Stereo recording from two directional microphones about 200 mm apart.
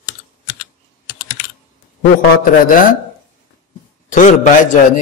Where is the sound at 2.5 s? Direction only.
45° left (ahead or behind).